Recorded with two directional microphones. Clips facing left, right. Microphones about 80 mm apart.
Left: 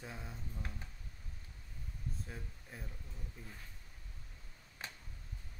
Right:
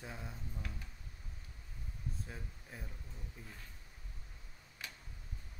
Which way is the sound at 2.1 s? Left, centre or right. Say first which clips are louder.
Even; centre.